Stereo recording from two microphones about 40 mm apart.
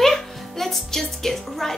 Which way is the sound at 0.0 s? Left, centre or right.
Centre.